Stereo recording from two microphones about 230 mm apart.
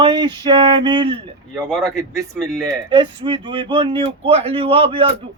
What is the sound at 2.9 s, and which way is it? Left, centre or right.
Speech, right.